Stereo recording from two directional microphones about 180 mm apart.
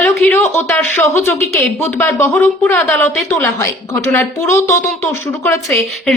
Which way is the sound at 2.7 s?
Centre (ahead or behind).